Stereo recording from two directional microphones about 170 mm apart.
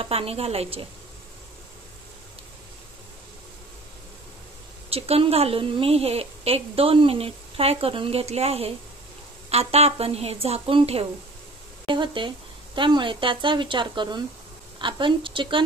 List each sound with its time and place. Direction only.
0.0 s a woman's voice: 35° right (ahead or behind)
4.8 s a woman's voice: 35° right (ahead or behind)